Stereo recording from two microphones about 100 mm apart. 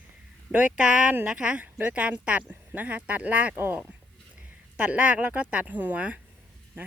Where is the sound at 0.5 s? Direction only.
10° right (ahead or behind).